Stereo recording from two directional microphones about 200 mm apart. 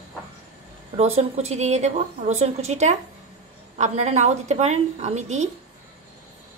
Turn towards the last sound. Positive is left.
turn(degrees=-35)  # may be behind; listen again after turning